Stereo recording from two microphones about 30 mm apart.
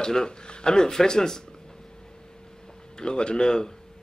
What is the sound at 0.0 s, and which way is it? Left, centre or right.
A man's voice, left.